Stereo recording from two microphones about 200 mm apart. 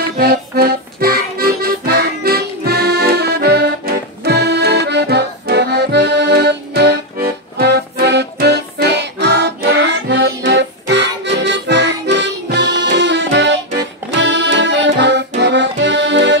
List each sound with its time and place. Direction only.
0.2 s accordion: 50° right (ahead or behind)